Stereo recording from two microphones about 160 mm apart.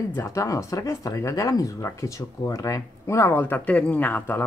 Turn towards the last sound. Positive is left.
turn(degrees=10)  # may be behind; listen again after turning